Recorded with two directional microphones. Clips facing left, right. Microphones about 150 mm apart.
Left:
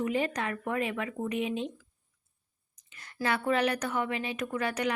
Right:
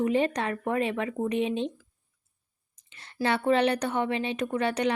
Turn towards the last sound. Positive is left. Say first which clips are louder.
# right 4 dB
turn(degrees=-30)  # may be behind; listen again after turning